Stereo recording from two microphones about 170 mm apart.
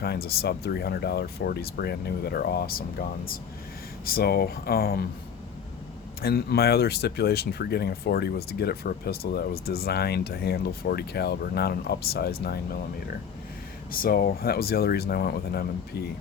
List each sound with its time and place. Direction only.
0.0 s speech: 65° left (ahead or behind)
6.2 s speech: 65° left (ahead or behind)
13.9 s speech: 60° left (ahead or behind)